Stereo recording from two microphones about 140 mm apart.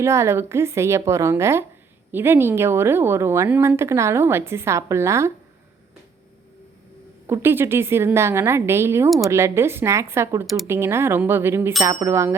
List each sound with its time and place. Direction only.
0.0 s a woman's voice: 20° right (ahead or behind)
7.3 s a woman's voice: 15° right (ahead or behind)